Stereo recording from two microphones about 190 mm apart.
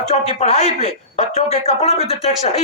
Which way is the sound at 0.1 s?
35° left (ahead or behind).